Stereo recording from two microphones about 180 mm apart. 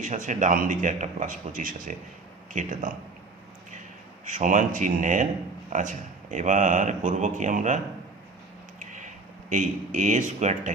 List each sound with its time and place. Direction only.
0.0 s a man's voice: 45° right (ahead or behind)
4.3 s a man's voice: 45° right (ahead or behind)
8.8 s a sound: 45° right (ahead or behind)
9.5 s a man's voice: 45° right (ahead or behind)